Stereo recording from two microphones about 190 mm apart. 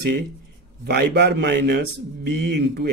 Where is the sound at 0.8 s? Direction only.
60° right (ahead or behind).